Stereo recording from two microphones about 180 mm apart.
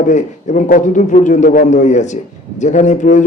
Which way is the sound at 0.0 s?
45° left (ahead or behind).